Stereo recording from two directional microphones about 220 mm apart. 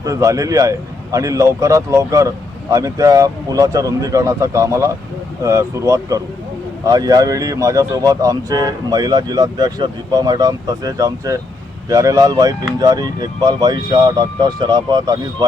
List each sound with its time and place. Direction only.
0.0 s a man's voice: 15° right (ahead or behind)